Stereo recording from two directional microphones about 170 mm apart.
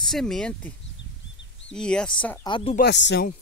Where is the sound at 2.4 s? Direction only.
30° left (ahead or behind).